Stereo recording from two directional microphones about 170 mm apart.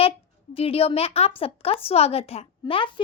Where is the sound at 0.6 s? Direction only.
35° left (ahead or behind).